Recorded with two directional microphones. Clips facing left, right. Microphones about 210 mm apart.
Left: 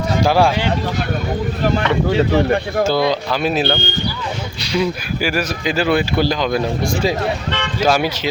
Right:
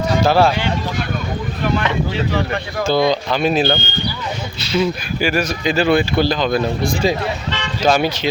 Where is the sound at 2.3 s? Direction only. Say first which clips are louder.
Left 4 dB; 45° left (ahead or behind).